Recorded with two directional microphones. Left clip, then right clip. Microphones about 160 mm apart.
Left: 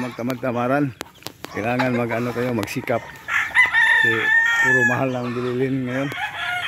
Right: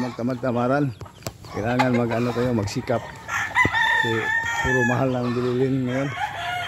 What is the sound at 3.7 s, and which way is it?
Chicken, 5° left (ahead or behind).